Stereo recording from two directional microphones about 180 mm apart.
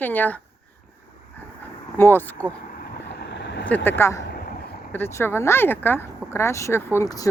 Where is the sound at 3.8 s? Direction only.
15° left (ahead or behind).